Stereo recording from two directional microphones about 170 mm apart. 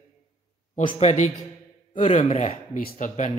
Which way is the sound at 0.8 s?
35° left (ahead or behind).